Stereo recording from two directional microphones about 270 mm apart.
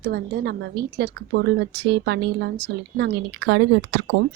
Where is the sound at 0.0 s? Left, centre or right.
Right.